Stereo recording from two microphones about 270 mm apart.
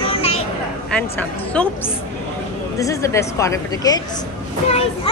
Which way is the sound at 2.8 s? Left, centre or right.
Centre.